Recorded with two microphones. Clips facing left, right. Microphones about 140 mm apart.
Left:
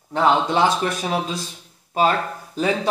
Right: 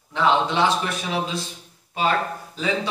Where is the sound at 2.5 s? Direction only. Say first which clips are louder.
Left 5 dB; 50° left (ahead or behind).